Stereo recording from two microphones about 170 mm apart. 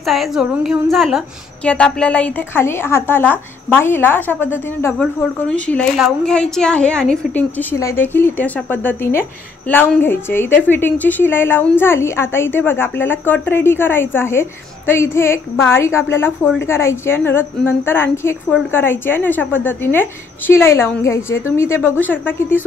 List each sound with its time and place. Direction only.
0.0 s a woman's voice: centre (ahead or behind)